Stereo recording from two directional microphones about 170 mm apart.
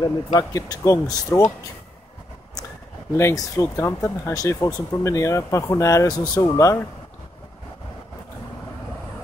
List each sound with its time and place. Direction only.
0.0 s speech: 20° left (ahead or behind)
3.2 s speech: 15° left (ahead or behind)